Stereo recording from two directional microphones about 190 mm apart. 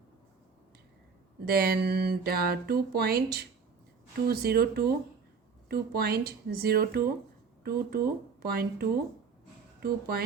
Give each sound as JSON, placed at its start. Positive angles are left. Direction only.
{"t": 1.5, "sound": "speech", "side_deg": -55}